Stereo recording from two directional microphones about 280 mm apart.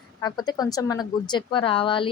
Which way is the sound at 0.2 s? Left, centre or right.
Centre.